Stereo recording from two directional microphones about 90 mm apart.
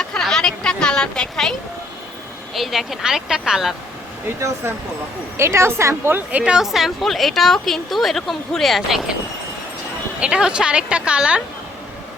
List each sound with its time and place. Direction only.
0.0 s a sound: 5° left (ahead or behind)
2.6 s a woman's voice: centre (ahead or behind)
5.4 s a woman's voice: 30° right (ahead or behind)
6.4 s a woman's voice: 5° right (ahead or behind)
10.2 s a woman's voice: 10° right (ahead or behind)